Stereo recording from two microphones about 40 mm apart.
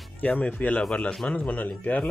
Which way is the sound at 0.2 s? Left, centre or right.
Left.